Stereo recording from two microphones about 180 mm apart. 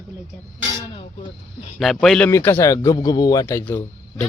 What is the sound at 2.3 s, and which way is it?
A man's voice, 15° left (ahead or behind).